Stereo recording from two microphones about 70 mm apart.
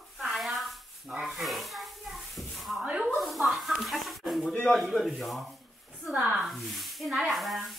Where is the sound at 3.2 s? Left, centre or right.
Centre.